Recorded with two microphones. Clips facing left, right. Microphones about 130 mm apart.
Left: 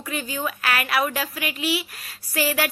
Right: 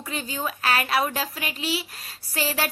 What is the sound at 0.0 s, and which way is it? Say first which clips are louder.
A woman's voice: left 2 dB; 30° right (ahead or behind).